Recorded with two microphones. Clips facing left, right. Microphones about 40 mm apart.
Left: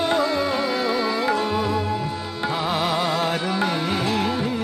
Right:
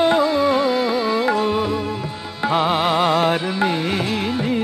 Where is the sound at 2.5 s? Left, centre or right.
Right.